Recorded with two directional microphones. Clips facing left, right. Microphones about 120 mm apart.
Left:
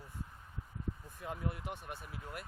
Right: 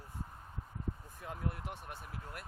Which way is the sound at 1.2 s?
5° left (ahead or behind).